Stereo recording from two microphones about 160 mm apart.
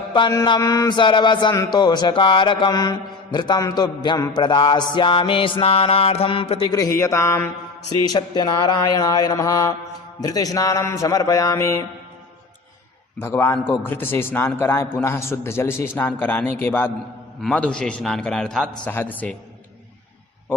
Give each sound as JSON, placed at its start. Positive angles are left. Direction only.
{"t": 0.1, "sound": "a man's voice", "side_deg": 25}
{"t": 4.4, "sound": "music", "side_deg": 30}
{"t": 6.7, "sound": "a man's voice", "side_deg": 20}
{"t": 13.1, "sound": "a man's voice", "side_deg": 15}